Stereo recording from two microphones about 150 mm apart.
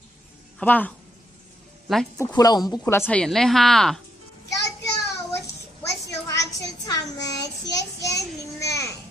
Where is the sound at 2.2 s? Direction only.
25° left (ahead or behind).